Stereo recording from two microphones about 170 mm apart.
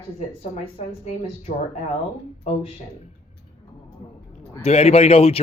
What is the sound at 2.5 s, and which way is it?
Speech, 35° left (ahead or behind).